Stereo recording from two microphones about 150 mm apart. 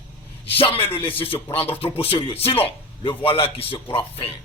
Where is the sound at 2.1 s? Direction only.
40° left (ahead or behind).